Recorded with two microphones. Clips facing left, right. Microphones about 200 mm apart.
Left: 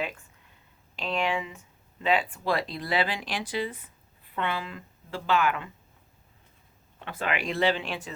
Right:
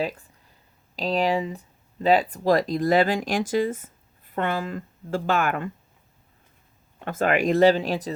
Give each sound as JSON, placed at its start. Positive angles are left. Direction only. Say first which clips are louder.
{"t": 0.0, "sound": "a sound", "louder": "right 6 dB", "side_deg": -35}
{"t": 0.9, "sound": "speech", "louder": "right 6 dB", "side_deg": -35}
{"t": 7.0, "sound": "speech", "louder": "right 9 dB", "side_deg": -45}